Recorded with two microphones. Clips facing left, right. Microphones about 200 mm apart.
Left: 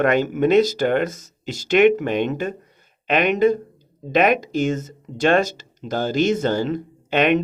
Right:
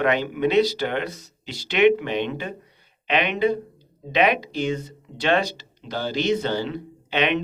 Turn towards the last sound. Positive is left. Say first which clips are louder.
# left 5 dB
turn(degrees=45)  # may be behind; listen again after turning